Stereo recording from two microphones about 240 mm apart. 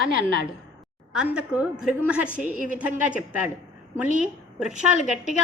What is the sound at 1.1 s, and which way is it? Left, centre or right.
A woman's voice, centre.